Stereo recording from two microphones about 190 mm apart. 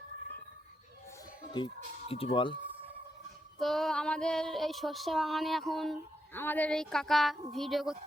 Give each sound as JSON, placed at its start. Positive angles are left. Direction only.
{"t": 1.5, "sound": "speech", "side_deg": 25}
{"t": 3.6, "sound": "female singing", "side_deg": 0}